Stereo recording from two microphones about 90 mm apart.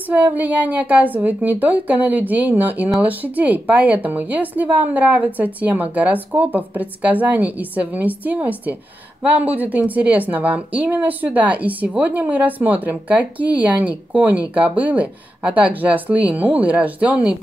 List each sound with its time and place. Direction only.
0.1 s a woman's voice: 20° right (ahead or behind)